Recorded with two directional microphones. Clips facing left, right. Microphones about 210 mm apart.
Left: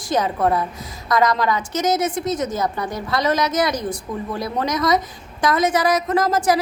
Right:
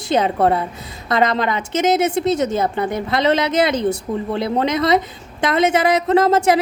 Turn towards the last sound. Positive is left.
turn(degrees=-25)  # may be behind; listen again after turning